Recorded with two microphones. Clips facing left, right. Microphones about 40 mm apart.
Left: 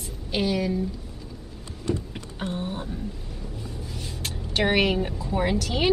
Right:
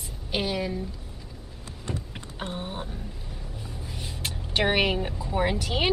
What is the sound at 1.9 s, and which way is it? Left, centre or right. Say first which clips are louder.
Vehicle: left 7 dB; centre.